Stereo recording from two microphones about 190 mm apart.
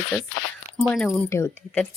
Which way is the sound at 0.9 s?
5° left (ahead or behind).